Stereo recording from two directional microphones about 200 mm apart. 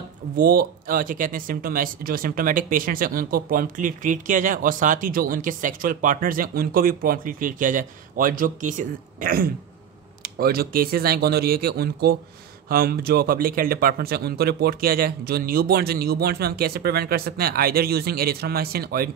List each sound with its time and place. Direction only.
0.4 s speech: 45° right (ahead or behind)